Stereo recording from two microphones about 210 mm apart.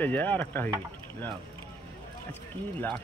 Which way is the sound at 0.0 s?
10° left (ahead or behind).